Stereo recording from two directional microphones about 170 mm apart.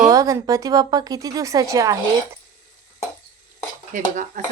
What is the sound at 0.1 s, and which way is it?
Speech, 20° right (ahead or behind).